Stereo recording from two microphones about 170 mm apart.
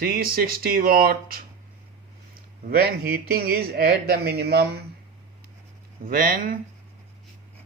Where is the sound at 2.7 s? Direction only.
65° right (ahead or behind).